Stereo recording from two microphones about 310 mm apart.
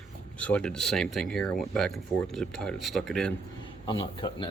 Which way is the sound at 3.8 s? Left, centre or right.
Centre.